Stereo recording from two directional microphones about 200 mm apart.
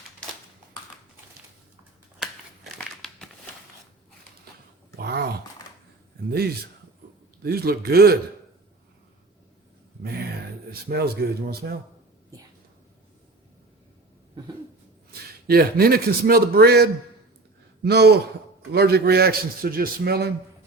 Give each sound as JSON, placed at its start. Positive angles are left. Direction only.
{"t": 2.7, "sound": "crumpling", "side_deg": 0}
{"t": 4.9, "sound": "a sound", "side_deg": -55}
{"t": 7.4, "sound": "a man's voice", "side_deg": -50}
{"t": 10.7, "sound": "a man's voice", "side_deg": -50}
{"t": 15.4, "sound": "a man's voice", "side_deg": -50}